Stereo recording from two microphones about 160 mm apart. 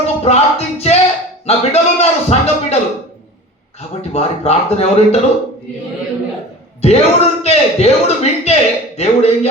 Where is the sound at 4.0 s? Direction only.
40° left (ahead or behind).